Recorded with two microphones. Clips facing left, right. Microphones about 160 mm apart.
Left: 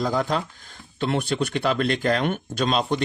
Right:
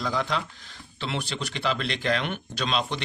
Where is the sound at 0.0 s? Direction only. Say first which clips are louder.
Left 4 dB; 45° left (ahead or behind).